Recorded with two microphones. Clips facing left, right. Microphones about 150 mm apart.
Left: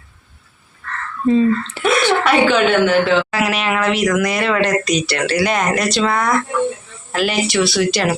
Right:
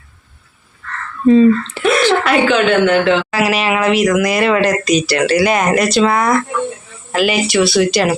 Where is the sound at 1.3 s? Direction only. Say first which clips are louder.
Right 5 dB; 90° right.